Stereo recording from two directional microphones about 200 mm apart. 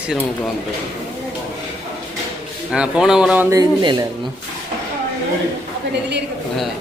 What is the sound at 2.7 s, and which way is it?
A man's voice, 5° right (ahead or behind).